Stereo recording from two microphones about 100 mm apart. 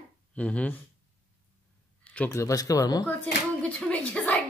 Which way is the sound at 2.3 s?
30° left (ahead or behind).